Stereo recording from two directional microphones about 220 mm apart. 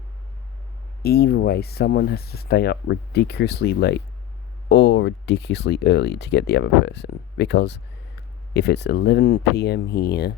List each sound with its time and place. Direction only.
1.0 s speech: 45° left (ahead or behind)